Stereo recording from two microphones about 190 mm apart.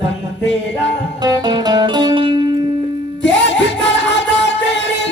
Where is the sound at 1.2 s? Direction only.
20° right (ahead or behind).